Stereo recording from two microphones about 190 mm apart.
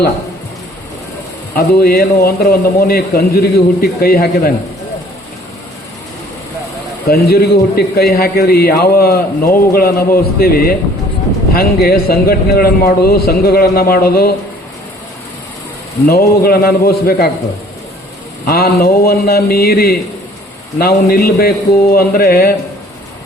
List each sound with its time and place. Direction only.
1.5 s a man's voice: 55° left (ahead or behind)
7.1 s a man's voice: 55° left (ahead or behind)
16.0 s a man's voice: 55° left (ahead or behind)
18.4 s a man's voice: 50° left (ahead or behind)